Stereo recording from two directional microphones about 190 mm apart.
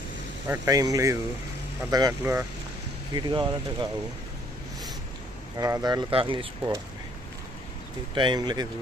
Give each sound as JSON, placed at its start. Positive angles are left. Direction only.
{"t": 0.4, "sound": "speech", "side_deg": -15}
{"t": 3.2, "sound": "speech", "side_deg": -25}
{"t": 5.5, "sound": "speech", "side_deg": -20}
{"t": 8.1, "sound": "speech", "side_deg": -25}